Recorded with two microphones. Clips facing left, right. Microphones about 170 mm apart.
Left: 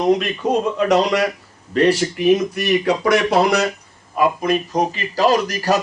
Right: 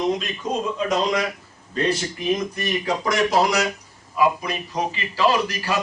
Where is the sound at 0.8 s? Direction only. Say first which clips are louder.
Left 5 dB; 75° left (ahead or behind).